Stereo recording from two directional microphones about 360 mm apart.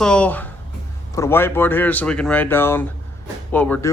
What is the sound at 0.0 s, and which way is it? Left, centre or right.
A man's voice, centre.